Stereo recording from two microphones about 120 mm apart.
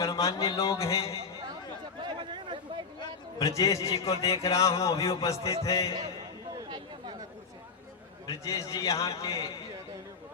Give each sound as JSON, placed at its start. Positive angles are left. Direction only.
{"t": 0.0, "sound": "a man's voice", "side_deg": 30}
{"t": 2.0, "sound": "a sound", "side_deg": -40}
{"t": 3.0, "sound": "a man's voice", "side_deg": 30}
{"t": 6.6, "sound": "chatter", "side_deg": -40}
{"t": 8.4, "sound": "a man's voice", "side_deg": 30}